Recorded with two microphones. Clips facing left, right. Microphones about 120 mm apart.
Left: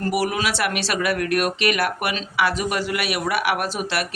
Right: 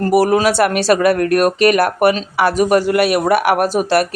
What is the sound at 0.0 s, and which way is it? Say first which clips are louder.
Speech: right 10 dB; 40° right (ahead or behind).